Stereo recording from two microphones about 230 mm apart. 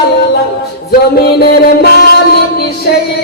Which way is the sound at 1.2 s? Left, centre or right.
Left.